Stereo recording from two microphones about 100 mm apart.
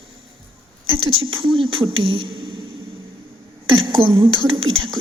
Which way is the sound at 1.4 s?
65° right (ahead or behind).